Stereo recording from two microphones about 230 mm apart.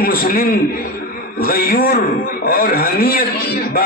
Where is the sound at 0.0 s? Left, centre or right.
Left.